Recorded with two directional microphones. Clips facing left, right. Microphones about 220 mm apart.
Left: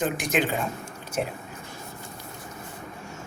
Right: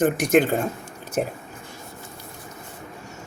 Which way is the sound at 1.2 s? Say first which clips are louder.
Right 4 dB; 45° right (ahead or behind).